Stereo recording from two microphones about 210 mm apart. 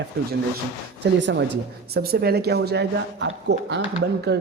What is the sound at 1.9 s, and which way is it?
Speech, 50° right (ahead or behind).